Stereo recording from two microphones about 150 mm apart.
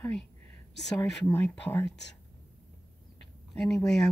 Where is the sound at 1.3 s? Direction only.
15° left (ahead or behind).